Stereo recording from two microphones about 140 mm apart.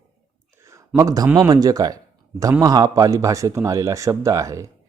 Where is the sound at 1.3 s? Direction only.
25° right (ahead or behind).